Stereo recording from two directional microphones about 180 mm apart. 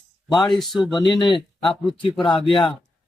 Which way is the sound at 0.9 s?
25° left (ahead or behind).